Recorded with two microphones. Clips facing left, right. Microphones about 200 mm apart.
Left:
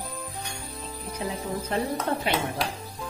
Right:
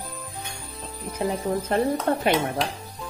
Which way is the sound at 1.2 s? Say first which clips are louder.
Right 6 dB; 55° right (ahead or behind).